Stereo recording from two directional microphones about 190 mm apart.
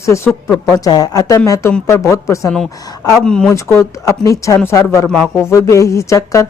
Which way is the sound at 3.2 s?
5° left (ahead or behind).